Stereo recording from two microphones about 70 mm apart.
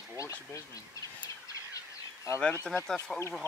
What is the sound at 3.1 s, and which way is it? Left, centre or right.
Speech, centre.